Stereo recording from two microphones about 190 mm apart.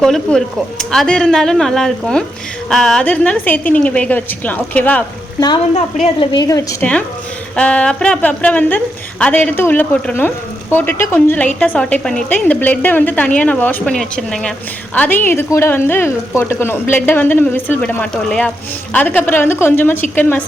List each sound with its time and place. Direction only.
0.0 s a woman's voice: centre (ahead or behind)
5.7 s a woman's voice: 35° left (ahead or behind)
6.3 s a woman's voice: 20° left (ahead or behind)